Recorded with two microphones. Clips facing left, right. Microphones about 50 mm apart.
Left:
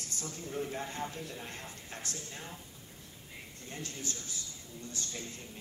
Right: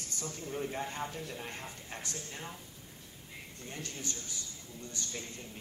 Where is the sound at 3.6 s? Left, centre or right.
Right.